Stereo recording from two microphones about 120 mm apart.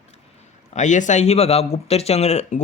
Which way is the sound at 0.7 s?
85° left.